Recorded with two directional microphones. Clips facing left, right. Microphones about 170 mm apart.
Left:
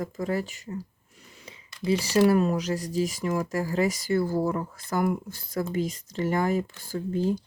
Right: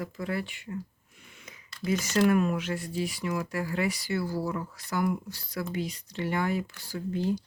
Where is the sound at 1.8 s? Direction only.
30° left (ahead or behind).